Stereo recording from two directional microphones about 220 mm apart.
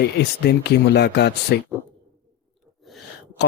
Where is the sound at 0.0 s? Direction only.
50° left (ahead or behind).